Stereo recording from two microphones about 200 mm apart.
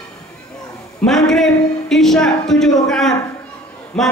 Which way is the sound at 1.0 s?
Centre (ahead or behind).